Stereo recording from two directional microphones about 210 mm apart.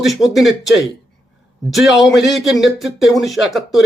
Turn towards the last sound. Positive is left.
turn(degrees=0)  # may be behind; listen again after turning